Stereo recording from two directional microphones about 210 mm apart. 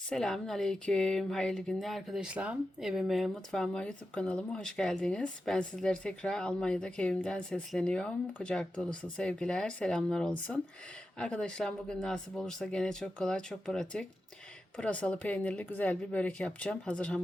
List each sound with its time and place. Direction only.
0.1 s speech: centre (ahead or behind)